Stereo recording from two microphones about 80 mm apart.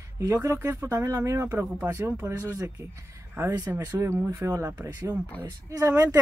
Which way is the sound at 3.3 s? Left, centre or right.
Right.